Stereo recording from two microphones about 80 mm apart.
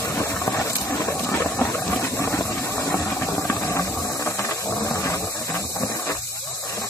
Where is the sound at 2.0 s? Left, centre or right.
Left.